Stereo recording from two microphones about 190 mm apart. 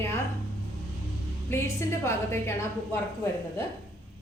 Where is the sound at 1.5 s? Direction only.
15° left (ahead or behind).